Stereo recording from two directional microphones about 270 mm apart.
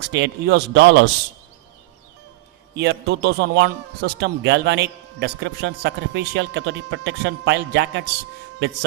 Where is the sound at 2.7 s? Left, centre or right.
Right.